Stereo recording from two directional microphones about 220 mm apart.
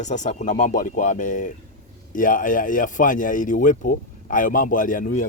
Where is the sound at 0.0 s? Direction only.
35° left (ahead or behind).